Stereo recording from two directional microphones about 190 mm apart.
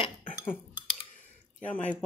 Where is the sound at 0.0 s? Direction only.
25° left (ahead or behind).